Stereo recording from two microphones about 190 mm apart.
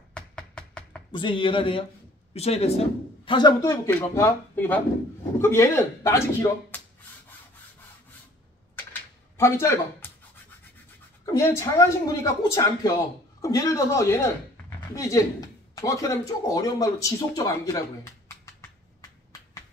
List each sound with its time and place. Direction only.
0.1 s a sound: 5° left (ahead or behind)
1.1 s a man's voice: 25° left (ahead or behind)
9.4 s speech: 15° left (ahead or behind)
11.2 s speech: 15° left (ahead or behind)